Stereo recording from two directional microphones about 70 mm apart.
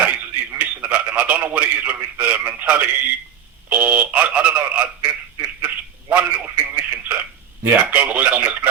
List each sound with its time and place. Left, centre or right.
0.6 s a man's voice: centre
3.7 s telephone: right
7.6 s speech: right